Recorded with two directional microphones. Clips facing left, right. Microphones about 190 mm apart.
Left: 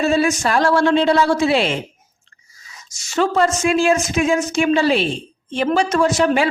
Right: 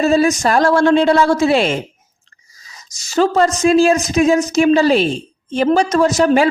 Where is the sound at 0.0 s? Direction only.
40° right (ahead or behind).